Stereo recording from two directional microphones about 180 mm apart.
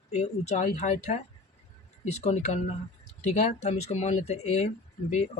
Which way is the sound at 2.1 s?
40° left (ahead or behind).